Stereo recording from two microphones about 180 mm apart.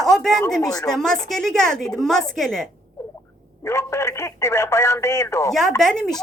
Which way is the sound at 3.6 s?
15° left (ahead or behind).